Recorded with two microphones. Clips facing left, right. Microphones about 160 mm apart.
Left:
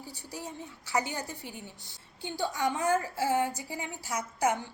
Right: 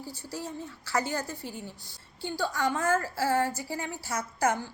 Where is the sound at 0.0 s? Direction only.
40° right (ahead or behind).